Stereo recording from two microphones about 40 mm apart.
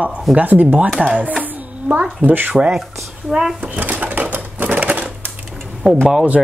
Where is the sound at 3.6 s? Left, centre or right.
Right.